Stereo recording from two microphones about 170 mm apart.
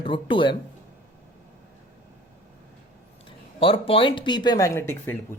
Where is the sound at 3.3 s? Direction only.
35° left (ahead or behind); by 5.1 s 15° left (ahead or behind).